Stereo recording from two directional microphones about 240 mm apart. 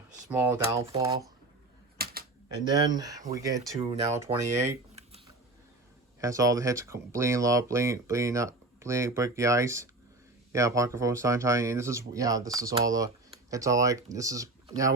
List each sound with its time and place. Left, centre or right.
0.3 s speech: centre
2.0 s typewriter: right
2.6 s speech: centre
6.1 s speech: centre